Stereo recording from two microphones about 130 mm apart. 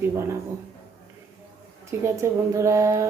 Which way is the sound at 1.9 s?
20° right (ahead or behind).